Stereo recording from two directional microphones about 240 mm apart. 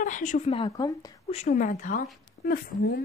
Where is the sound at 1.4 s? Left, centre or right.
Left.